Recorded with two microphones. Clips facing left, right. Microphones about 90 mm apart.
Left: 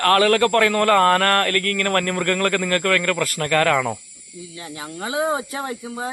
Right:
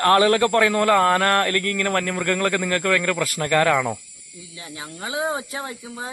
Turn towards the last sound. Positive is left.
turn(degrees=30)  # may be behind; listen again after turning